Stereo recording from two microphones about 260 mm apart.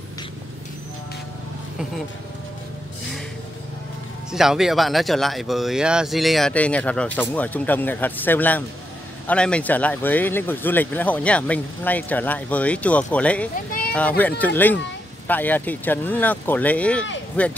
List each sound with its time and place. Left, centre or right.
4.3 s speech: centre
13.7 s a sound: left
13.9 s speech: centre